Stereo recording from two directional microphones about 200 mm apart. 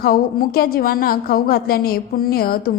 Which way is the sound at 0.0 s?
50° left (ahead or behind).